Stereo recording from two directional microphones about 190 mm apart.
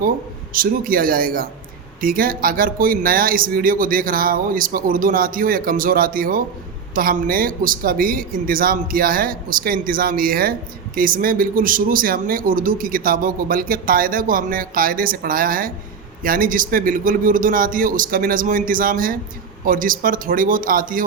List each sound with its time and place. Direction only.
0.5 s speech: 50° right (ahead or behind)